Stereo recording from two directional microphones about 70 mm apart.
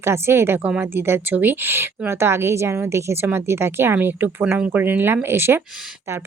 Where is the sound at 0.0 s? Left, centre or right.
Right.